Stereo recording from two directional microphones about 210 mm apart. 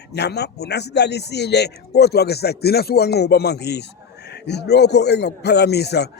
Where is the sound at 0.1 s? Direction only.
50° left (ahead or behind).